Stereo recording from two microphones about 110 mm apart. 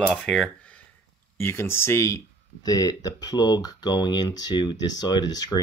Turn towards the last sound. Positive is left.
turn(degrees=35)  # may be behind; listen again after turning